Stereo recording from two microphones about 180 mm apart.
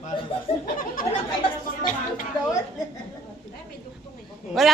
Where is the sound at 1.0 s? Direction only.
50° left (ahead or behind).